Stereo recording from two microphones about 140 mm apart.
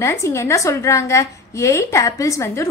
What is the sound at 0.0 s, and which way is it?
A woman's voice, 20° left (ahead or behind).